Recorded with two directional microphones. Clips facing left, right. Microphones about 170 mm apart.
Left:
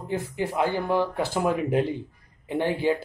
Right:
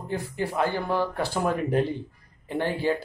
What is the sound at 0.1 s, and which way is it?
Speech, 20° left (ahead or behind).